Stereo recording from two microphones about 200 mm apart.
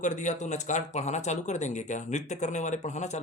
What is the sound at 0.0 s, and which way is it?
Speech, 40° left (ahead or behind).